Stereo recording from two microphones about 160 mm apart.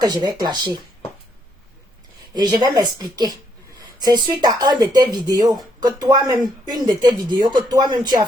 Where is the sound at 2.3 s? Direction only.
25° right (ahead or behind).